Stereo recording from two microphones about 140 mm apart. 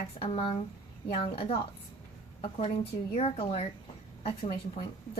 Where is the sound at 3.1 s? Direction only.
45° left (ahead or behind).